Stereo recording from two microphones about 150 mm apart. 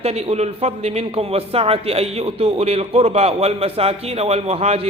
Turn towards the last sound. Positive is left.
turn(degrees=-45)  # may be behind; listen again after turning